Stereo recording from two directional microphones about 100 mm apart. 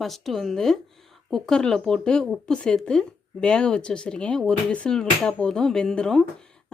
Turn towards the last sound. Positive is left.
turn(degrees=5)  # may be behind; listen again after turning